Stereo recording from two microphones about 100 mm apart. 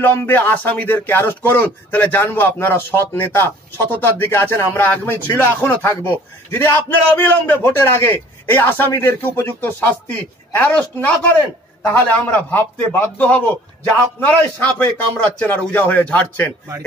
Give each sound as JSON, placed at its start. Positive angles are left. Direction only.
{"t": 0.0, "sound": "speech", "side_deg": 20}
{"t": 11.9, "sound": "a man's voice", "side_deg": 20}